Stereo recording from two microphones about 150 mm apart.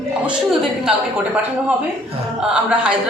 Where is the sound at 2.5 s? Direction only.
5° right (ahead or behind).